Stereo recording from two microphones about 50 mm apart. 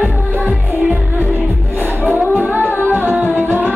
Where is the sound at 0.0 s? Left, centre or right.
Right.